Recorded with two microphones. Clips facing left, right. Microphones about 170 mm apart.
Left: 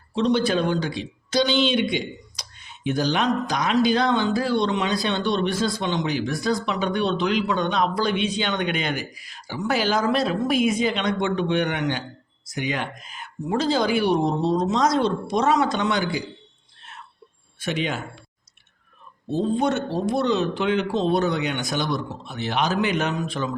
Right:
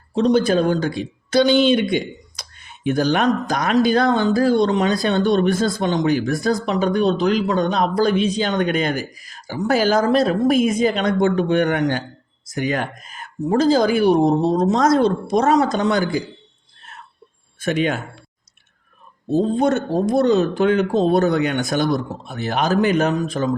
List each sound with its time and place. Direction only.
0.1 s a man's voice: 45° right (ahead or behind)
17.6 s speech: 50° right (ahead or behind)
19.3 s speech: 45° right (ahead or behind)